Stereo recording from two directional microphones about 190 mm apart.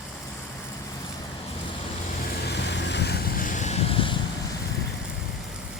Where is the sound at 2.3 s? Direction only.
60° left (ahead or behind); by 4.2 s 30° left (ahead or behind).